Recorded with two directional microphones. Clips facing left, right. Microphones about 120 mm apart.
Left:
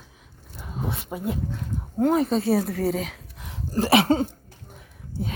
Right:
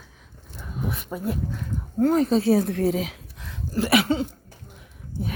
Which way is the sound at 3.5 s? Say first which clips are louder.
Left 2 dB; 35° left (ahead or behind).